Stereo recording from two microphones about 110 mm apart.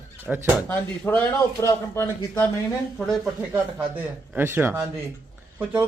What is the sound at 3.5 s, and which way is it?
Speech, 15° right (ahead or behind).